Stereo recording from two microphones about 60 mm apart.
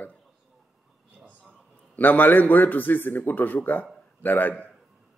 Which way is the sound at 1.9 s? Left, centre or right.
Left.